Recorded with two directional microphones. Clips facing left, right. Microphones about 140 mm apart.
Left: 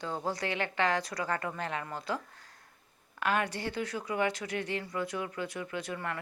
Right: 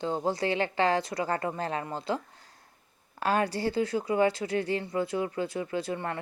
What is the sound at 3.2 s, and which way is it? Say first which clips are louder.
Speech: right 4 dB; 35° right (ahead or behind).